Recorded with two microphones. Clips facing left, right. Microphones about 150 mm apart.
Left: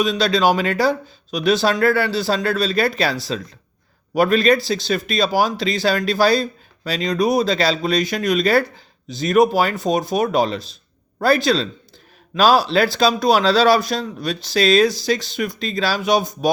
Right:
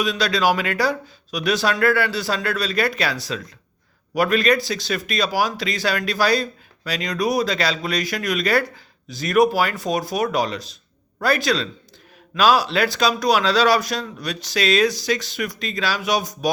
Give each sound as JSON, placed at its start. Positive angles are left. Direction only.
{"t": 0.0, "sound": "speech", "side_deg": 25}